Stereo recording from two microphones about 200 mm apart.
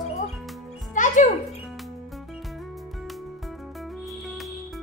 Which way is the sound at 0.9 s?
40° left (ahead or behind).